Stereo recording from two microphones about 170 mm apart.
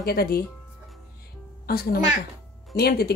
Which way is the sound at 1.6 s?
65° left (ahead or behind).